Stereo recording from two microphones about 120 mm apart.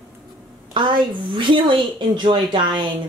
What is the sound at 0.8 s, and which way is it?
Speech, 40° right (ahead or behind).